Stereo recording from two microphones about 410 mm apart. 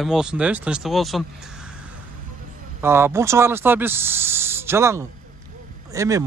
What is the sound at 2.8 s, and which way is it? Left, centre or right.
Speech, centre.